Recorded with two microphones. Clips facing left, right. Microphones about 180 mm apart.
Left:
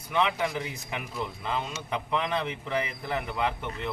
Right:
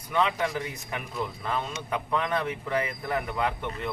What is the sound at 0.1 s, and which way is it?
Speech, 20° left (ahead or behind).